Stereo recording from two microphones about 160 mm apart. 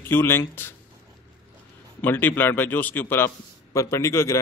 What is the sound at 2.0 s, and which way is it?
A man's voice, 10° left (ahead or behind).